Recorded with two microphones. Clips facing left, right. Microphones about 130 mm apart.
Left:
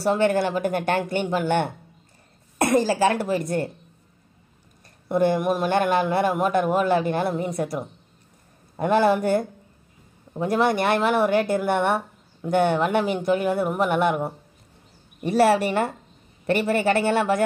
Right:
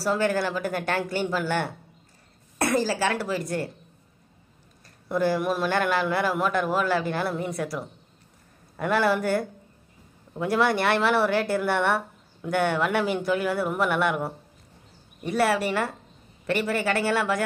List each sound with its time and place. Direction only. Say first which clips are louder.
0.0 s speech: left 4 dB; 25° left (ahead or behind)
5.0 s speech: left 3 dB; 20° left (ahead or behind)